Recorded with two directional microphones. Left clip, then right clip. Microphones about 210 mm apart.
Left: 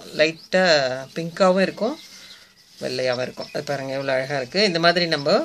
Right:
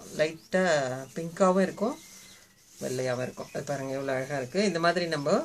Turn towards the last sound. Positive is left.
turn(degrees=35)  # may be behind; listen again after turning